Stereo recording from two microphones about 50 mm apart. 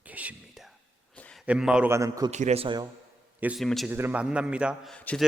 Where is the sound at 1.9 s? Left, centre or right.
Right.